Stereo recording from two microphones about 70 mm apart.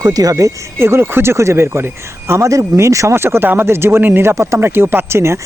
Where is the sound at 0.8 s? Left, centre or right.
Right.